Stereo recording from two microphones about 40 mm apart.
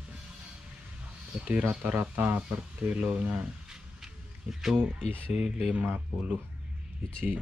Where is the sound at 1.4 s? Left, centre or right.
Right.